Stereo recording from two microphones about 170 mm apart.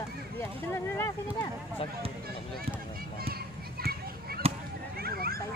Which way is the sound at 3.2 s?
65° right (ahead or behind).